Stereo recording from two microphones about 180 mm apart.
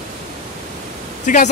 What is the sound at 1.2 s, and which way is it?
Speech, 45° left (ahead or behind).